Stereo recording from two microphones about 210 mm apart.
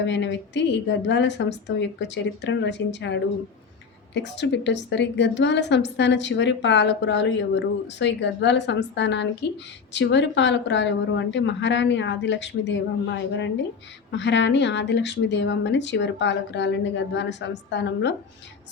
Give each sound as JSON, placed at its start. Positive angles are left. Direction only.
{"t": 0.0, "sound": "a woman's voice", "side_deg": 60}